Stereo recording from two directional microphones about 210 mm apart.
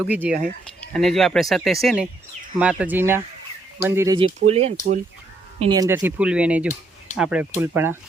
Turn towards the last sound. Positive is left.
turn(degrees=-10)  # may be behind; listen again after turning